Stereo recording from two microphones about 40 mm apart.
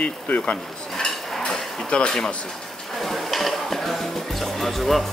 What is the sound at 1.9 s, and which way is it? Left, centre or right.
Speech, left.